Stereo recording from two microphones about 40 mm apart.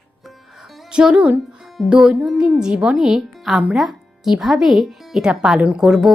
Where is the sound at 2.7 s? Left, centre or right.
Right.